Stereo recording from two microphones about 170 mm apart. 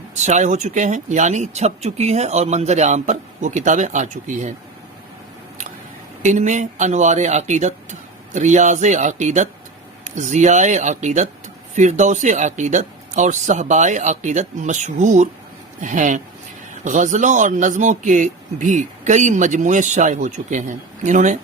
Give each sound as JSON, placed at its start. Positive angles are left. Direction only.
{"t": 0.1, "sound": "a man's voice", "side_deg": -40}
{"t": 6.2, "sound": "a man's voice", "side_deg": -45}